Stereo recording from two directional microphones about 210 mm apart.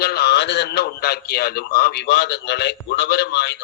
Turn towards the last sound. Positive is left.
turn(degrees=55)  # may be behind; listen again after turning